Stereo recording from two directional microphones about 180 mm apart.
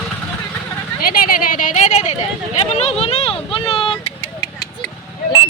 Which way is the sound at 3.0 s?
35° left (ahead or behind).